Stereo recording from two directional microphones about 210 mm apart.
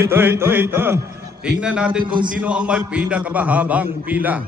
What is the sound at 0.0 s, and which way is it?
A man's voice, 10° right (ahead or behind).